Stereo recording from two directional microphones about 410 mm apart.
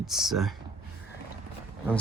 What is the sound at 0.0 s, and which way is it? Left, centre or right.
Speech, centre.